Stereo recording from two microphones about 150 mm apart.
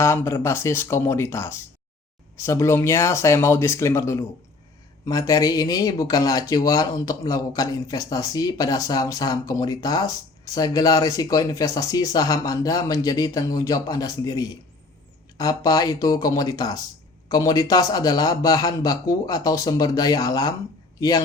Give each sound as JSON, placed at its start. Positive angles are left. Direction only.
{"t": 0.0, "sound": "speech", "side_deg": 15}